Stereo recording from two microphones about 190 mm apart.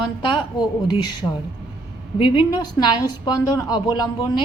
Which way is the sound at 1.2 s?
10° left (ahead or behind).